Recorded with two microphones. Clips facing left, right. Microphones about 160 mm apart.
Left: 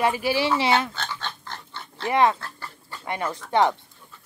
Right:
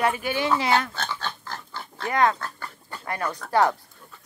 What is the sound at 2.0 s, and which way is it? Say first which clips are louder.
Speech: left 2 dB; 25° left (ahead or behind).